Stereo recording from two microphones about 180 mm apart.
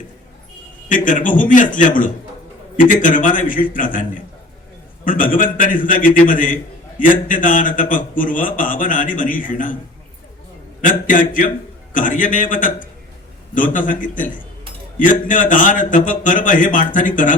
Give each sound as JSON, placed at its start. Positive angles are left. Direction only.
{"t": 0.9, "sound": "a man's voice", "side_deg": 45}
{"t": 10.8, "sound": "a man's voice", "side_deg": 45}